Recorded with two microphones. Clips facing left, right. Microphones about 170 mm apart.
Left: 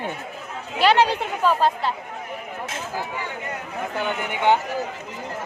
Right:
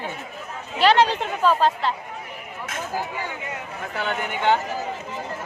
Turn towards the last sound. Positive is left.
turn(degrees=15)  # may be behind; listen again after turning